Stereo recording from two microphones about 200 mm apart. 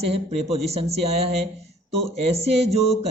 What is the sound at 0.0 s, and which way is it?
Speech, 30° right (ahead or behind).